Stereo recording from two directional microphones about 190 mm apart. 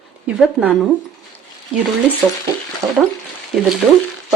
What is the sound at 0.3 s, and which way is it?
Speech, 5° right (ahead or behind).